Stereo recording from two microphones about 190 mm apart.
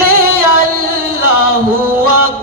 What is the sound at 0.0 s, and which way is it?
Music, 50° right (ahead or behind).